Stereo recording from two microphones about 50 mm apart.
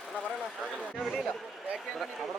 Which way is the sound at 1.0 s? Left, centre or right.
Centre.